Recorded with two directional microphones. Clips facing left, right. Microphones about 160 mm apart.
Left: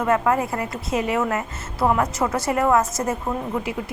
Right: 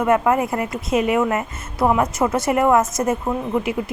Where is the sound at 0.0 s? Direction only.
20° right (ahead or behind).